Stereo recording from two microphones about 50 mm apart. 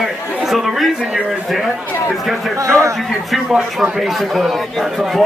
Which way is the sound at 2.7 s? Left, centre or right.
Right.